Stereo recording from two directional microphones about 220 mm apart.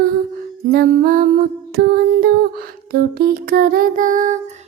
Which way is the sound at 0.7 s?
45° right (ahead or behind).